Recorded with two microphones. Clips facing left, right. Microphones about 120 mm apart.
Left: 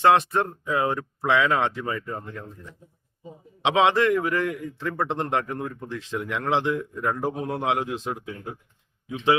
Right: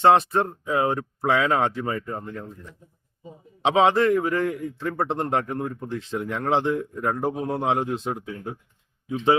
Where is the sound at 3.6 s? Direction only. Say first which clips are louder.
Right 1 dB; 35° right (ahead or behind).